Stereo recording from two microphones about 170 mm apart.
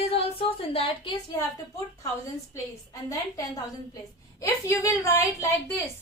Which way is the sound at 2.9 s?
20° left (ahead or behind).